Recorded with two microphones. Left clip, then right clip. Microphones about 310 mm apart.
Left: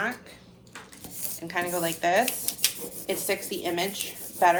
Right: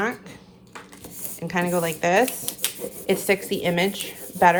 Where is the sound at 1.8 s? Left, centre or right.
Right.